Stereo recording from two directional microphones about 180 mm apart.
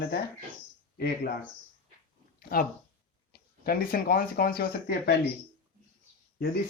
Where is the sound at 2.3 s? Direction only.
50° left (ahead or behind).